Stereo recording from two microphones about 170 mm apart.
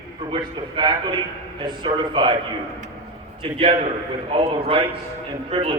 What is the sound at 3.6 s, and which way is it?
A man's voice, 35° right (ahead or behind).